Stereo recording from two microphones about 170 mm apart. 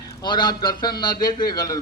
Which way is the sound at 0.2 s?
25° left (ahead or behind).